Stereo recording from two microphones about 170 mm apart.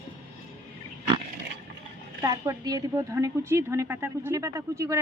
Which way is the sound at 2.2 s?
20° right (ahead or behind).